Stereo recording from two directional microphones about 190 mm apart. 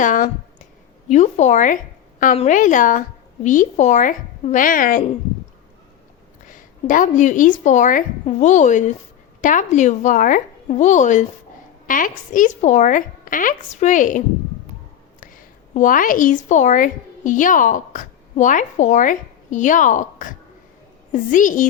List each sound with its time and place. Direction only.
0.0 s a woman's voice: 45° left (ahead or behind)
6.5 s a woman's voice: 45° left (ahead or behind)
15.2 s a woman's voice: 45° left (ahead or behind)